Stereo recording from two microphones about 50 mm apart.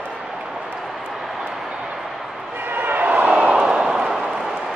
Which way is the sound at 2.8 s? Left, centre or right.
Right.